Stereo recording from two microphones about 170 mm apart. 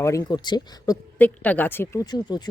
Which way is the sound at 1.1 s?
10° left (ahead or behind).